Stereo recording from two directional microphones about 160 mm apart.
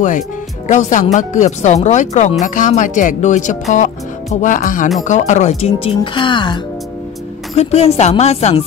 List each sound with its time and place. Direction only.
0.7 s speech: 50° left (ahead or behind); by 6.6 s 30° left (ahead or behind)
7.5 s speech: 40° left (ahead or behind)